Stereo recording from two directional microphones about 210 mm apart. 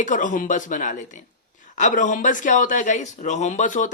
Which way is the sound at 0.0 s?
40° left (ahead or behind).